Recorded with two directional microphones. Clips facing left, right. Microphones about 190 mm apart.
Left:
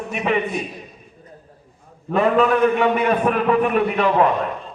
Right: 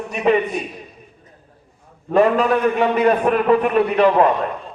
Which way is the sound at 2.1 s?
35° right (ahead or behind).